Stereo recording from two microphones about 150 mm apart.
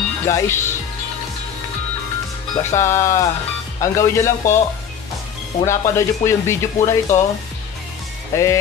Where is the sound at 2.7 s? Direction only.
20° left (ahead or behind).